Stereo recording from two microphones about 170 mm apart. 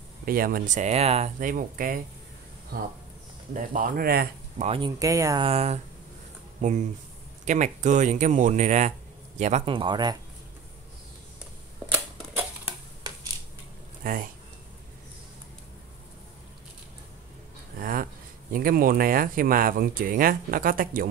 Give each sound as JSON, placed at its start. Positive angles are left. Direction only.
{"t": 0.2, "sound": "speech", "side_deg": -60}
{"t": 1.4, "sound": "speech", "side_deg": -55}
{"t": 4.6, "sound": "speech", "side_deg": -35}
{"t": 4.9, "sound": "speech", "side_deg": -20}
{"t": 5.4, "sound": "speech", "side_deg": -35}
{"t": 9.7, "sound": "speech", "side_deg": -30}
{"t": 11.9, "sound": "typewriter", "side_deg": -10}
{"t": 13.0, "sound": "a sound", "side_deg": -20}
{"t": 14.0, "sound": "speech", "side_deg": -55}
{"t": 17.7, "sound": "a sound", "side_deg": -55}
{"t": 18.5, "sound": "speech", "side_deg": -60}